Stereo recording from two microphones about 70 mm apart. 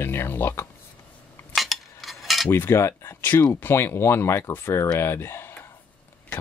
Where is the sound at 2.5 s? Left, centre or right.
Left.